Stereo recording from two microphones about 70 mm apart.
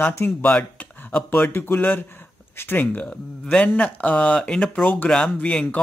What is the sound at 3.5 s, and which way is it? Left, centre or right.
Speech, centre.